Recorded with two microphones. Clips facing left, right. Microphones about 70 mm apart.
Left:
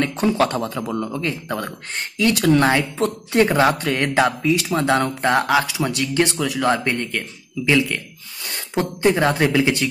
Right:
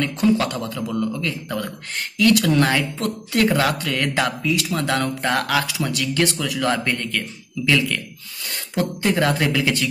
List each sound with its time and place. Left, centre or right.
0.0 s a man's voice: left